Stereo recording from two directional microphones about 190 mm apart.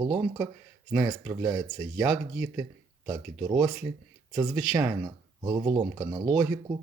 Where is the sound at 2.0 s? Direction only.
5° right (ahead or behind).